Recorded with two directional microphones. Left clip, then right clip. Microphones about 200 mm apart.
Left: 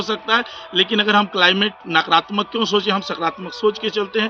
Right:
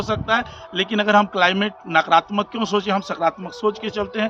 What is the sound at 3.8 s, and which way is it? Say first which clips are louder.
Speech: left 3 dB; 45° right (ahead or behind).